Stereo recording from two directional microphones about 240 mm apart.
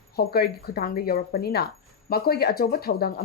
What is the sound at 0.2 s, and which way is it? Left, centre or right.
Speech, left.